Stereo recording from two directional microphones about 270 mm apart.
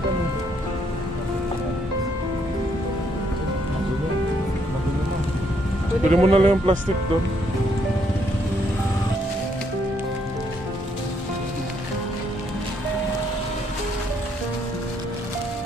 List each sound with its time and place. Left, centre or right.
6.0 s speech: right